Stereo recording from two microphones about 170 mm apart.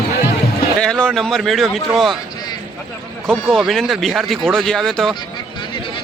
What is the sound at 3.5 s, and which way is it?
Speech, centre (ahead or behind).